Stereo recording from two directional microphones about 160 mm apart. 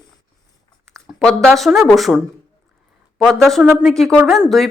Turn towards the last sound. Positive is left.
turn(degrees=0)  # may be behind; listen again after turning